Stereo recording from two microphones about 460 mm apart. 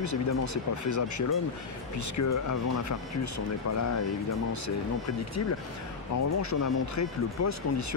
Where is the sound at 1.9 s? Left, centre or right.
Left.